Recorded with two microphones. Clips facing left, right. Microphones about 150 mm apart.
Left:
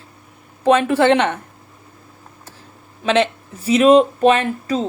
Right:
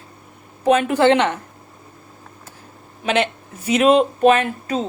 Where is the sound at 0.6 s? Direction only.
30° left (ahead or behind).